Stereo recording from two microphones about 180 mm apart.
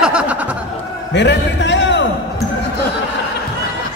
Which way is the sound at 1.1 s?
75° left (ahead or behind).